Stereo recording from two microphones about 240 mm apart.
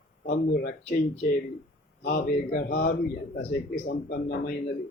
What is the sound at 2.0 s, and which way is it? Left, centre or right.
A man's voice, left.